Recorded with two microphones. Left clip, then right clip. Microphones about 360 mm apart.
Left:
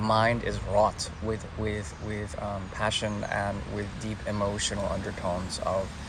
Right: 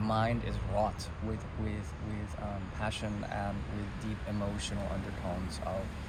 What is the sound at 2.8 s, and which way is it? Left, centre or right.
Speech, left.